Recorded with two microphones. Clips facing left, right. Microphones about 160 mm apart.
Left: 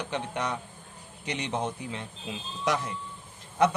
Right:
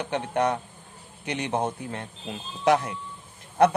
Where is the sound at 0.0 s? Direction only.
55° right (ahead or behind).